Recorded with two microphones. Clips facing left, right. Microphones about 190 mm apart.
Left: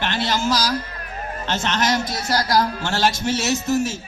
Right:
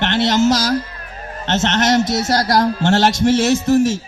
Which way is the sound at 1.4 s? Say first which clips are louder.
Right 6 dB; 70° right (ahead or behind).